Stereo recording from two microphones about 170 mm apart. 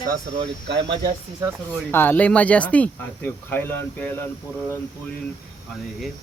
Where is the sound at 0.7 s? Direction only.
90° right.